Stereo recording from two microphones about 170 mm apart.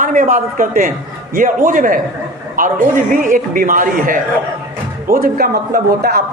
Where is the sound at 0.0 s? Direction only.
50° right (ahead or behind).